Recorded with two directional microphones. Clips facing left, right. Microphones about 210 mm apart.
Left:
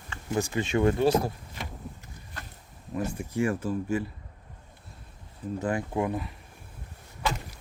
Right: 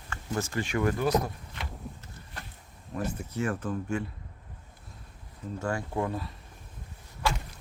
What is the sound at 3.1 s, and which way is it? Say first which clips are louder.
Speech: left 4 dB; 10° left (ahead or behind).